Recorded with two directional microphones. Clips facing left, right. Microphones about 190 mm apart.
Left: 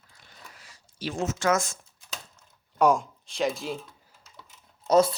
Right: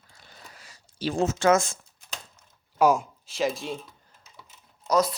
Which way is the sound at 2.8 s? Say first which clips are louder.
Right 1 dB; 5° right (ahead or behind).